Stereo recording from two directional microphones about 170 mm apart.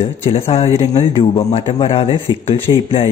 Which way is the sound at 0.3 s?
35° left (ahead or behind).